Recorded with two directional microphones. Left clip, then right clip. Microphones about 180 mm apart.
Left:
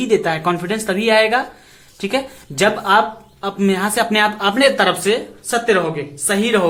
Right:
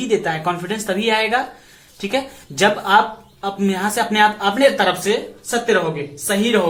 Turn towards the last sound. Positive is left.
turn(degrees=40)  # may be behind; listen again after turning